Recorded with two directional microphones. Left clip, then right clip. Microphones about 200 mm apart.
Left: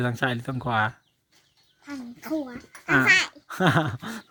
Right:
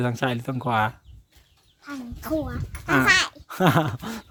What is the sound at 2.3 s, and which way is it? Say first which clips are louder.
Speech: right 3 dB; 10° right (ahead or behind).